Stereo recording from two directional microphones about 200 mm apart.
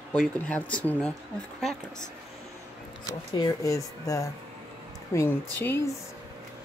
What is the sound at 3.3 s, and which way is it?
Speech, 20° left (ahead or behind).